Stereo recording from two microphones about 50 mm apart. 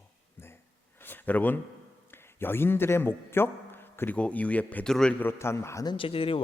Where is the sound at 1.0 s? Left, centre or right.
Left.